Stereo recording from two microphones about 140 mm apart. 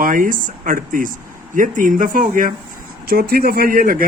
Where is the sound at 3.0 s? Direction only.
90° right.